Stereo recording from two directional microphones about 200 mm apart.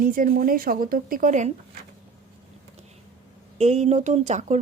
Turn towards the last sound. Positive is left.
turn(degrees=-35)  # may be behind; listen again after turning